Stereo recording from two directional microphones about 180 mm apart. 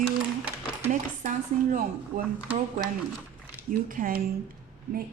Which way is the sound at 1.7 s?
50° right (ahead or behind).